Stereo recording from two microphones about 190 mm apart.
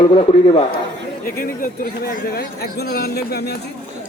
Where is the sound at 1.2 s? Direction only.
50° left (ahead or behind).